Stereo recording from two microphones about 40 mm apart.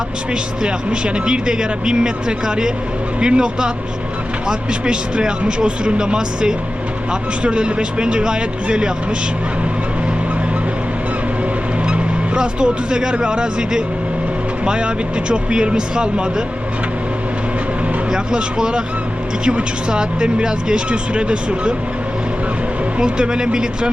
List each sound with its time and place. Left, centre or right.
0.6 s speech: right
11.9 s speech: right
18.1 s speech: centre
23.0 s speech: right